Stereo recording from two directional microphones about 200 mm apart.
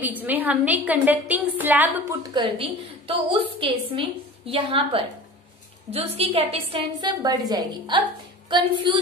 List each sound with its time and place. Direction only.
0.0 s a woman's voice: 10° right (ahead or behind)
3.1 s a woman's voice: 25° right (ahead or behind)